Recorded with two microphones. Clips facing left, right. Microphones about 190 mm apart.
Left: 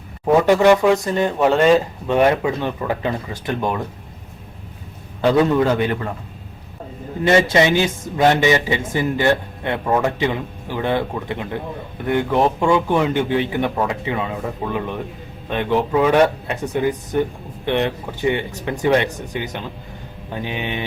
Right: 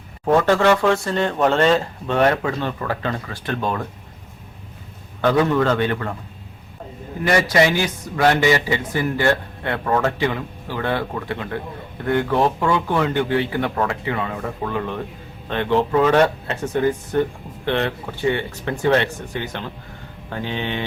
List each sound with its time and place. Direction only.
0.3 s speech: 15° left (ahead or behind)
5.2 s speech: 20° left (ahead or behind)
7.2 s speech: 25° left (ahead or behind)